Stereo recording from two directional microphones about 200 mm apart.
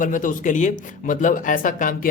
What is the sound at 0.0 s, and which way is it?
Speech, 40° left (ahead or behind).